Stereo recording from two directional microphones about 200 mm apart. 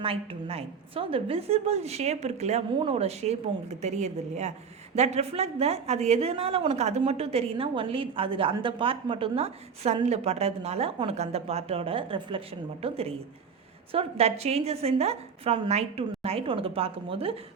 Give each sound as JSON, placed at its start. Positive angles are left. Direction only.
{"t": 0.0, "sound": "a woman's voice", "side_deg": -25}